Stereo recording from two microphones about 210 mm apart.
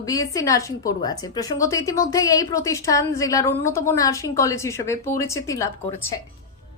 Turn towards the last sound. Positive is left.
turn(degrees=15)  # may be behind; listen again after turning